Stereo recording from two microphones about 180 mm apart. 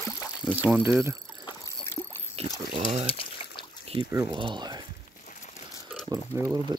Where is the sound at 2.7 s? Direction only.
35° right (ahead or behind).